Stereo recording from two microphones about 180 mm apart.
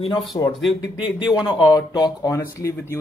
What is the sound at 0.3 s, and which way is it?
Speech, 20° left (ahead or behind).